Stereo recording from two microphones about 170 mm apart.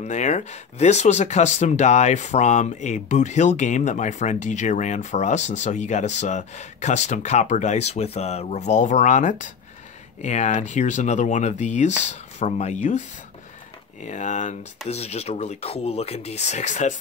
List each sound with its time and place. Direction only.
0.0 s speech: 45° left (ahead or behind)
14.0 s speech: 45° left (ahead or behind)